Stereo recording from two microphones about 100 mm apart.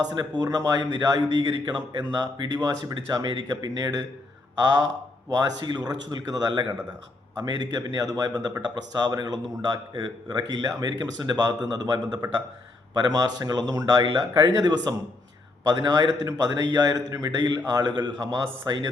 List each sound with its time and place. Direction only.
0.1 s a man's voice: 40° right (ahead or behind)
5.3 s speech: 45° right (ahead or behind)
12.2 s a man's voice: 35° right (ahead or behind)
14.0 s a man's voice: 50° right (ahead or behind)